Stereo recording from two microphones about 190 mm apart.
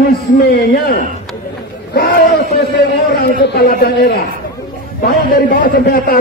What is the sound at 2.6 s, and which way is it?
A man's voice, 55° left (ahead or behind).